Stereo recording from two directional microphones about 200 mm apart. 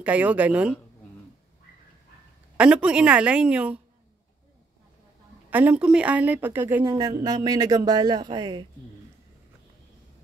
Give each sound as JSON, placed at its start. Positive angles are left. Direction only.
{"t": 0.0, "sound": "a woman's voice", "side_deg": -5}
{"t": 2.5, "sound": "a woman's voice", "side_deg": -5}
{"t": 5.5, "sound": "a woman's voice", "side_deg": -10}